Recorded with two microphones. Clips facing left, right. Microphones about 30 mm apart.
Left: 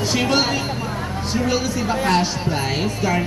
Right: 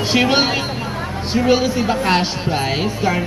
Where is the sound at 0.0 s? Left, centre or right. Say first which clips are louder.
Right 3 dB; right.